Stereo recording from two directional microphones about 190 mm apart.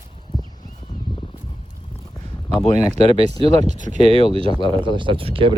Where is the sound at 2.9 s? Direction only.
30° right (ahead or behind).